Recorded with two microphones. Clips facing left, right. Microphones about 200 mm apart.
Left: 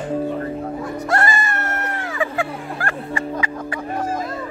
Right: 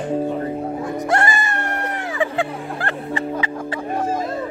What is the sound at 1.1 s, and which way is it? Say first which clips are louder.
Music: left 1 dB; 20° right (ahead or behind).